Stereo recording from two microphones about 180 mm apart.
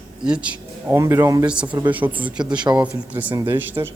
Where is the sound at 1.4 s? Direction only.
5° right (ahead or behind).